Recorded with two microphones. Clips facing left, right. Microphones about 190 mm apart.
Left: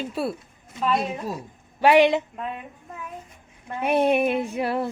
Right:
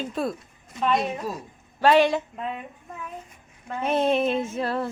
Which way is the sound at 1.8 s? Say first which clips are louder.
Left 2 dB; 15° left (ahead or behind).